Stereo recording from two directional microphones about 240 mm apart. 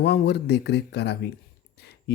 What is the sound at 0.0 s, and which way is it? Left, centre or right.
Speech, left.